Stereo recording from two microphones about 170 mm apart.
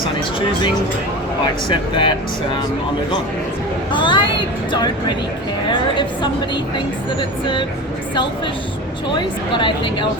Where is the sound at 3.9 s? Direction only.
30° left (ahead or behind).